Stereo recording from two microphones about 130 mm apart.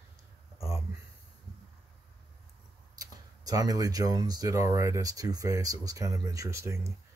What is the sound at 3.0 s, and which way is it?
Speech, 30° right (ahead or behind).